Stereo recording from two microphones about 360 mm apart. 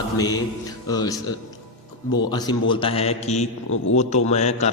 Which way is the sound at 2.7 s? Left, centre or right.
Centre.